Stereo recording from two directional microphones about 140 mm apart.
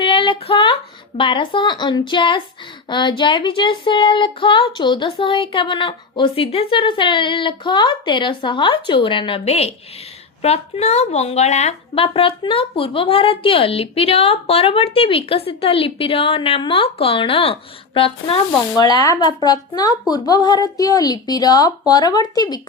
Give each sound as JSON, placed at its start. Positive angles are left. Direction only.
{"t": 0.0, "sound": "a woman's voice", "side_deg": 35}
{"t": 18.8, "sound": "a woman's voice", "side_deg": 30}